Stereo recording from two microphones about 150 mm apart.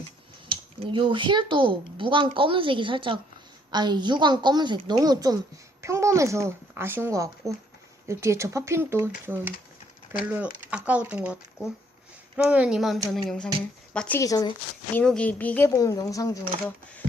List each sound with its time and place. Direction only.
0.4 s speech: 35° right (ahead or behind); by 14.2 s 5° left (ahead or behind)
14.2 s speech: 25° left (ahead or behind)
14.9 s speech: 5° left (ahead or behind); by 16.4 s 20° left (ahead or behind)